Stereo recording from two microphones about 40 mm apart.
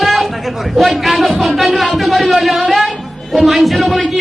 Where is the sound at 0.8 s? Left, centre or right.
Centre.